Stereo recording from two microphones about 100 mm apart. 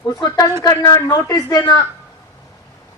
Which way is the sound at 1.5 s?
45° left (ahead or behind).